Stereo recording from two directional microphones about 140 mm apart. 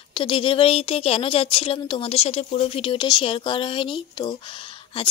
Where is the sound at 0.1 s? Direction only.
40° left (ahead or behind).